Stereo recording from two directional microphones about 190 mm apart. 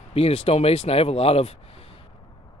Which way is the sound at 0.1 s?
30° left (ahead or behind).